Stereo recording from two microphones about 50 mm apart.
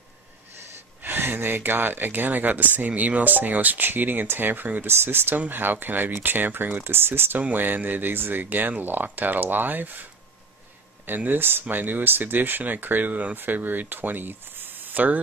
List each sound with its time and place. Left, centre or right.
1.0 s speech: right
4.8 s speech: right
11.1 s speech: right